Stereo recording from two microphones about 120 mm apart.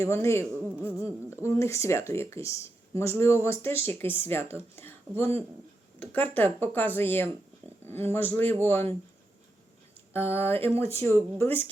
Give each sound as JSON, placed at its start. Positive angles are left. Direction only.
{"t": 0.0, "sound": "speech", "side_deg": 20}
{"t": 10.1, "sound": "speech", "side_deg": 20}